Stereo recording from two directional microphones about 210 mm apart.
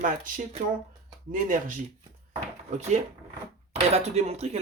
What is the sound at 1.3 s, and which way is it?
Speech, 40° right (ahead or behind).